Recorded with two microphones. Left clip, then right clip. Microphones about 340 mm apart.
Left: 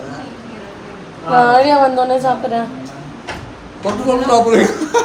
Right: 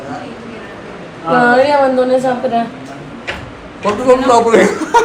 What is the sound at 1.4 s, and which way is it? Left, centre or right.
Speech, left.